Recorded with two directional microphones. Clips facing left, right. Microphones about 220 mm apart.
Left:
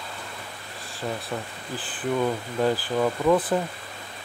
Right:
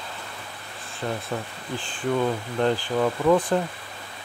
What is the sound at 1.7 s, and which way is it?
Speech, 5° left (ahead or behind).